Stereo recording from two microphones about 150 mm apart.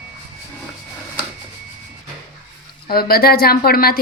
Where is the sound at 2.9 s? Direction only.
90° left.